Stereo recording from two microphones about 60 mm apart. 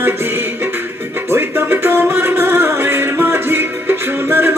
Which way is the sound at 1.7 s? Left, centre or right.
Right.